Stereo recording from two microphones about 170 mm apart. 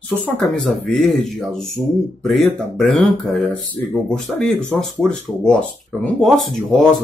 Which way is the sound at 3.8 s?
15° left (ahead or behind).